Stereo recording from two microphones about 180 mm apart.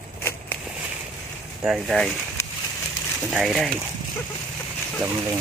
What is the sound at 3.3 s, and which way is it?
Speech, centre (ahead or behind).